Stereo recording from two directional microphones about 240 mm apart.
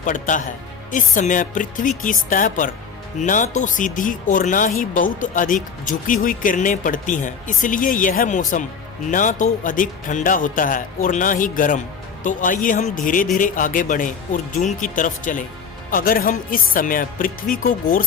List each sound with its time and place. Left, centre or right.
0.0 s speech: left